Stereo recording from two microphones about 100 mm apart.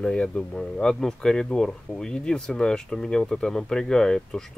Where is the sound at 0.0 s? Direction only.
10° left (ahead or behind).